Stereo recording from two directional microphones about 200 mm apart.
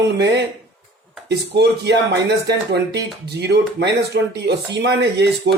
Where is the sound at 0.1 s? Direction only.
55° right (ahead or behind).